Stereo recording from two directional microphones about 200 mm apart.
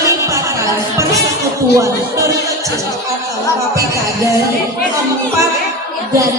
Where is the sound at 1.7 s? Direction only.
15° right (ahead or behind).